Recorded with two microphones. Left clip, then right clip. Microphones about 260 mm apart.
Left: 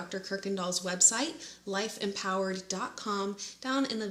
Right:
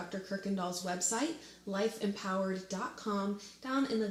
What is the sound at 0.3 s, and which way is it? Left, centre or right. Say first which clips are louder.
Speech: left 5 dB; left.